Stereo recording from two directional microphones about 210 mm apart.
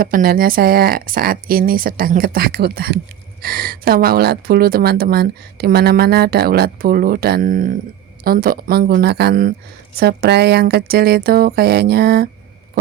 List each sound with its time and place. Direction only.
0.0 s speech: 45° right (ahead or behind)